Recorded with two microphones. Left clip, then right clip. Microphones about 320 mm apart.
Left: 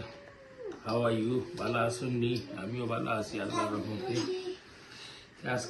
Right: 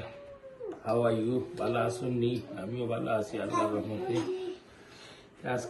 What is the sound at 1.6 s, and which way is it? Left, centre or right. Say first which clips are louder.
A man's voice: right 1 dB; centre.